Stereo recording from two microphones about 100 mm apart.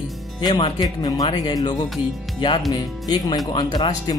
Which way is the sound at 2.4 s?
50° left (ahead or behind).